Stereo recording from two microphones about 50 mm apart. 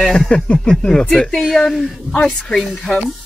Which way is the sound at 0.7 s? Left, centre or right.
Centre.